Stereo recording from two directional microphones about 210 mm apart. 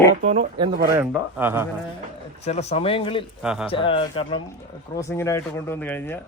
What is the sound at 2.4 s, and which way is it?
Speech, 30° left (ahead or behind).